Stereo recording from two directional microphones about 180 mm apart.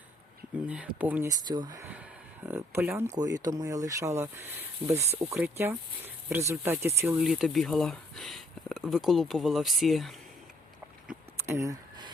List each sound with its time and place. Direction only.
0.7 s speech: 10° right (ahead or behind)
7.2 s speech: centre (ahead or behind)
11.1 s a sound: 15° right (ahead or behind)